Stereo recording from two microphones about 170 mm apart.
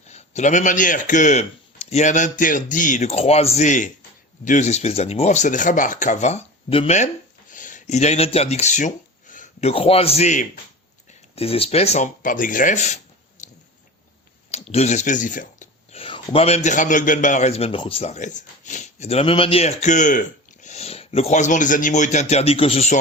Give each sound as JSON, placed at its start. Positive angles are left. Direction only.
{"t": 0.1, "sound": "a man's voice", "side_deg": 45}
{"t": 13.4, "sound": "a sound", "side_deg": 45}
{"t": 16.0, "sound": "a man's voice", "side_deg": 30}